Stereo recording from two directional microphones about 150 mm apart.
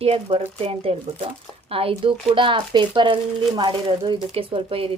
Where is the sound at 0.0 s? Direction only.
40° right (ahead or behind).